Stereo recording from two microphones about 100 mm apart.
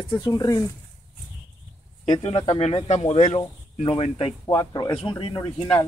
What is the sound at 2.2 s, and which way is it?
Speech, 55° left (ahead or behind).